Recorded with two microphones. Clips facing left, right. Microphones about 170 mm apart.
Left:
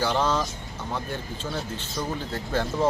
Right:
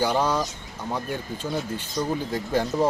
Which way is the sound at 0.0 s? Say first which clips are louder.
Right 1 dB; 10° right (ahead or behind).